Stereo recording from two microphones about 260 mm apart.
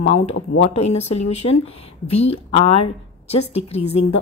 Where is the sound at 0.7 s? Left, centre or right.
Left.